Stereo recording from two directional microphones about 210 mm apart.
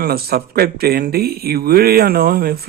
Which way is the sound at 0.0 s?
45° right (ahead or behind).